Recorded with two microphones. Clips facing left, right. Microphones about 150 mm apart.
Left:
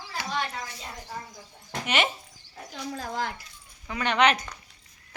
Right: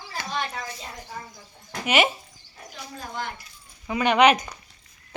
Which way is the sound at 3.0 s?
90° left.